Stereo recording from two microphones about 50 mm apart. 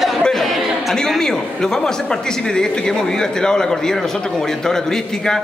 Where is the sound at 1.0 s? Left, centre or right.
Centre.